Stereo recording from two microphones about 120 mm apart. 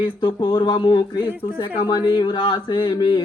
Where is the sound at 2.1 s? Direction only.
35° left (ahead or behind).